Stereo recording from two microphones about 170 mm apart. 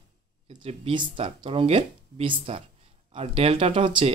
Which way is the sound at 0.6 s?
30° right (ahead or behind).